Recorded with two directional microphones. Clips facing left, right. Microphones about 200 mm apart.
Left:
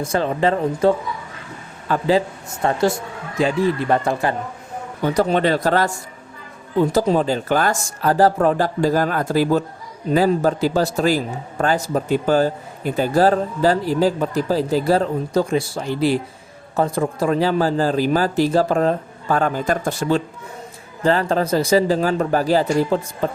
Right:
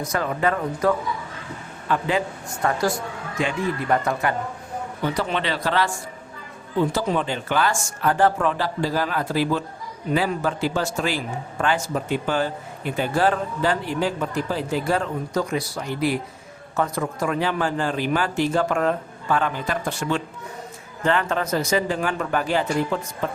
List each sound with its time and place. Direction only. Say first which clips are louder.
0.0 s a man's voice: left 4 dB; 30° left (ahead or behind)
5.0 s speech: left 8 dB; 45° left (ahead or behind)
6.9 s a man's voice: left 6 dB; 40° left (ahead or behind)